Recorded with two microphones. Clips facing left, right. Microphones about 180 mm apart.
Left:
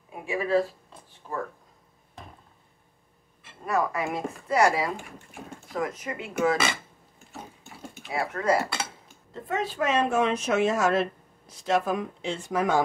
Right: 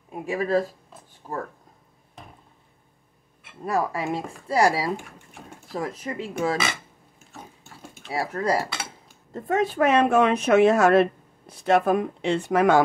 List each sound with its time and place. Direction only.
0.3 s speech: 40° right (ahead or behind)
3.6 s speech: 30° right (ahead or behind)
8.1 s speech: 35° right (ahead or behind)
9.3 s speech: 50° right (ahead or behind); by 12.8 s 70° right (ahead or behind)